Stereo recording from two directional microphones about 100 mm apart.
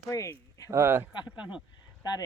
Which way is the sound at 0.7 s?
25° right (ahead or behind).